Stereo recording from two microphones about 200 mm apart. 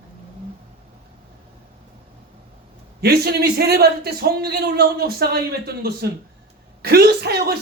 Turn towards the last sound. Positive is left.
turn(degrees=-50)  # may be behind; listen again after turning